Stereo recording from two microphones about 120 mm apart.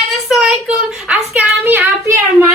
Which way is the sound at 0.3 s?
5° right (ahead or behind).